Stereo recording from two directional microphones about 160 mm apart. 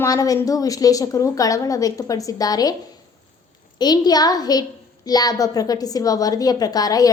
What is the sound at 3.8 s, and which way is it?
A woman's voice, 25° left (ahead or behind).